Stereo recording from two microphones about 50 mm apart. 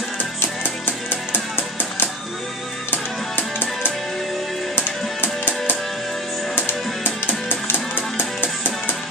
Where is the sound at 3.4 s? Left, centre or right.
Left.